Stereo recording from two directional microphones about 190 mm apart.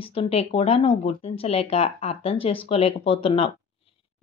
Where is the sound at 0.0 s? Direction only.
30° left (ahead or behind).